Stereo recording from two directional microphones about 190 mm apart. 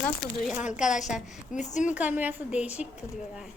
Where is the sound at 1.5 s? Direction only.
40° left (ahead or behind).